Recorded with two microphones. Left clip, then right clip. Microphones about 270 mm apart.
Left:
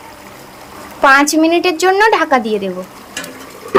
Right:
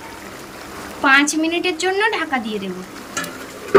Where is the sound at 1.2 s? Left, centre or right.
Centre.